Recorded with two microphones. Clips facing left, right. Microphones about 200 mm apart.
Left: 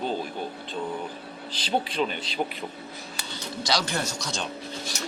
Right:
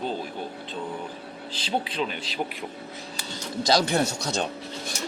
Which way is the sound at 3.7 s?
50° right (ahead or behind).